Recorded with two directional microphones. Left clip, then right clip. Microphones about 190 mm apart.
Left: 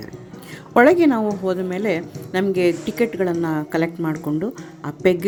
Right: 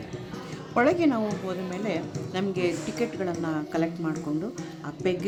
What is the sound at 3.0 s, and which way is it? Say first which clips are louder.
A woman's voice: left 10 dB; 20° left (ahead or behind).